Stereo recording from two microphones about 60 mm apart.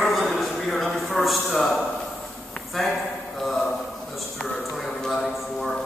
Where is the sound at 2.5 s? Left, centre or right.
Centre.